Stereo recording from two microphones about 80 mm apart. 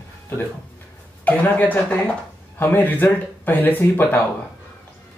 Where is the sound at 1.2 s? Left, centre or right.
Left.